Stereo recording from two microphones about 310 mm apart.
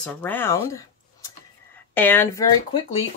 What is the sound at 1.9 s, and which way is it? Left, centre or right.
Speech, centre.